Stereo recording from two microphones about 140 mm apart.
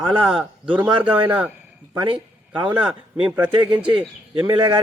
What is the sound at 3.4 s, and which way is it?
Speech, 35° right (ahead or behind).